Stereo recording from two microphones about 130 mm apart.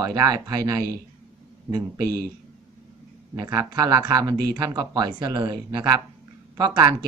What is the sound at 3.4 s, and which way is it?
Speech, 30° right (ahead or behind).